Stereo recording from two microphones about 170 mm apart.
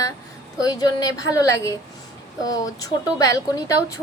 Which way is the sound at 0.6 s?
20° left (ahead or behind).